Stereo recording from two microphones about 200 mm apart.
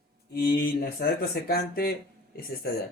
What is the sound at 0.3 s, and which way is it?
Speech, 50° left (ahead or behind).